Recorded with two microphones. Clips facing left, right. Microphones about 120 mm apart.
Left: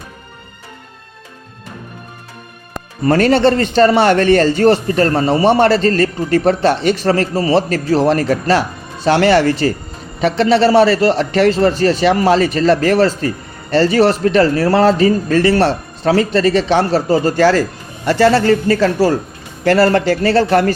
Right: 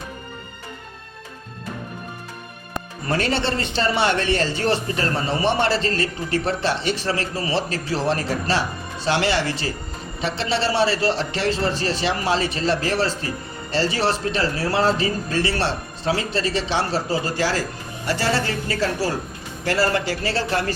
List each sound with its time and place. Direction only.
3.1 s a man's voice: 50° left (ahead or behind)